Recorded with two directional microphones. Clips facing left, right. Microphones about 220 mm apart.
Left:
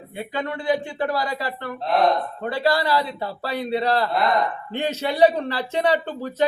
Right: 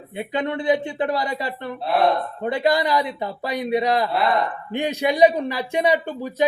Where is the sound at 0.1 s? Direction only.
20° right (ahead or behind).